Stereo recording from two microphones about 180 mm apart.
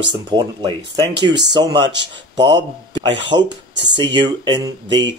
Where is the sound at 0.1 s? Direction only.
25° right (ahead or behind).